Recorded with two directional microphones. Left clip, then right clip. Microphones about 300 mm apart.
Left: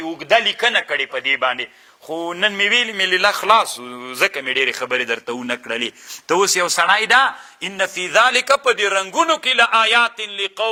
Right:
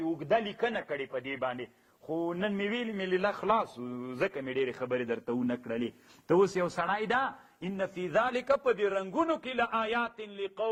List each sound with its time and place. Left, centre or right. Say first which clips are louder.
0.2 s speech: left 16 dB; centre
2.0 s speech: left 9 dB; left
2.3 s speech: left 17 dB; centre